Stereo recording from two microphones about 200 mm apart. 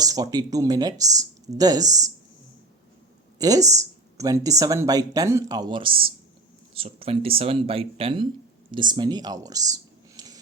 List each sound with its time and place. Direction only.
0.0 s speech: 20° right (ahead or behind)
3.3 s speech: 15° right (ahead or behind)